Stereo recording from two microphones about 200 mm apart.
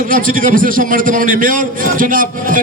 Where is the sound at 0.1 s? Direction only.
45° right (ahead or behind).